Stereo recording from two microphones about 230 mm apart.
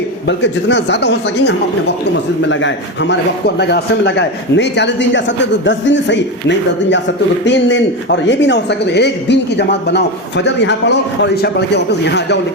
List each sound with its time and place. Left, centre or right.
0.3 s a man's voice: left
7.4 s a man's voice: left